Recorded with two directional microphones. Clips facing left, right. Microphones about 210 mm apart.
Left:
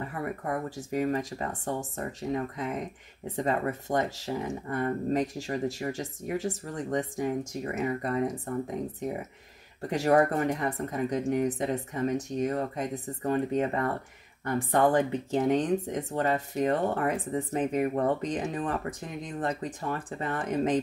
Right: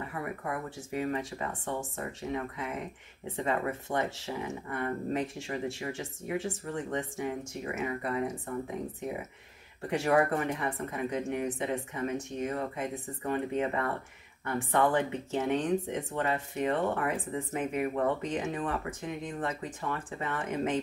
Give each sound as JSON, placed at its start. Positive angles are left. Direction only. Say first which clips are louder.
{"t": 0.5, "sound": "speech", "louder": "left 4 dB", "side_deg": 40}
{"t": 9.8, "sound": "speech", "louder": "left 3 dB", "side_deg": 40}